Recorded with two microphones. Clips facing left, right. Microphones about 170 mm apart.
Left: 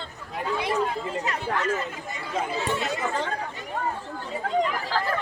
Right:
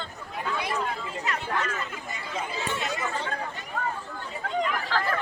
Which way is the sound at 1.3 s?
35° left (ahead or behind).